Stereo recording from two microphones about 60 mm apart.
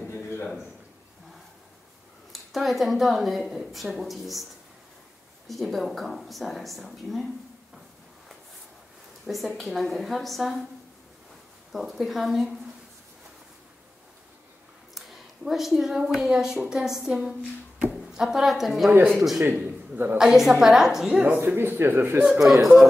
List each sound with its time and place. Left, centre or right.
2.3 s a woman's voice: centre
5.5 s a woman's voice: centre
9.2 s a woman's voice: centre
11.7 s a woman's voice: centre
15.0 s a woman's voice: centre
19.6 s a sound: right
20.2 s a woman's voice: centre
21.2 s speech: right
22.3 s a woman's voice: centre